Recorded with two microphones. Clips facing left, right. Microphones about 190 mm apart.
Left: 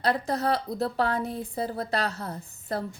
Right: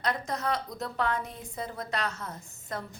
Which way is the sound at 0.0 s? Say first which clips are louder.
Left 5 dB; 35° left (ahead or behind).